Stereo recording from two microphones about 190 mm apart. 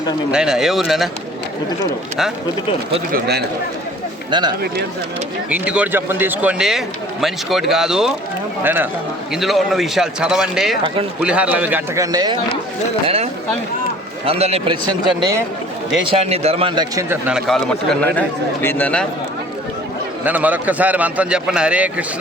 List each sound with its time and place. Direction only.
0.3 s a man's voice: 5° right (ahead or behind)
3.1 s speech: 55° right (ahead or behind)
4.3 s speech: 25° right (ahead or behind)
5.5 s a man's voice: 5° right (ahead or behind)
12.1 s speech: 20° right (ahead or behind)
14.3 s a man's voice: 30° right (ahead or behind)
16.0 s a man's voice: 35° right (ahead or behind); by 19.0 s 5° left (ahead or behind)
20.2 s a man's voice: 10° right (ahead or behind)